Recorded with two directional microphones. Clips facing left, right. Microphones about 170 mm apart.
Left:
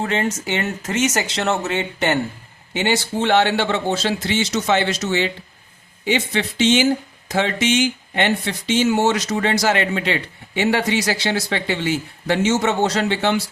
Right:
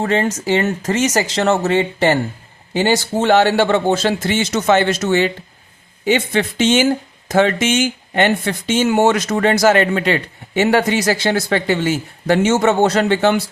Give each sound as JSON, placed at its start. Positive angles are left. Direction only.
{"t": 0.0, "sound": "speech", "side_deg": -40}